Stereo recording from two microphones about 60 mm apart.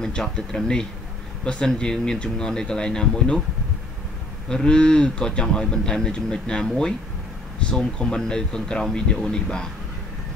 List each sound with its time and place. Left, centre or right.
0.0 s speech: centre
4.5 s speech: centre